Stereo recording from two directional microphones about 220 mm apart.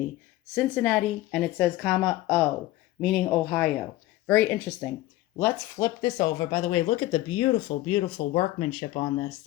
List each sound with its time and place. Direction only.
0.5 s a woman's voice: 5° left (ahead or behind); by 9.3 s 25° left (ahead or behind)